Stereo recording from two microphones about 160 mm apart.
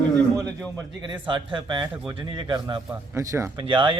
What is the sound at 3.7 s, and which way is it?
Speech, 30° right (ahead or behind).